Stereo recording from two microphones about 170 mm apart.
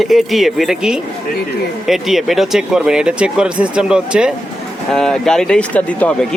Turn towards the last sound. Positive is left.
turn(degrees=10)  # may be behind; listen again after turning